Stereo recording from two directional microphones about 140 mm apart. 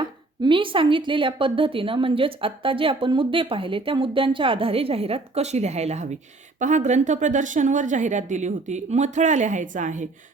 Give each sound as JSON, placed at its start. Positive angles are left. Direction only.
{"t": 0.0, "sound": "a woman's voice", "side_deg": -35}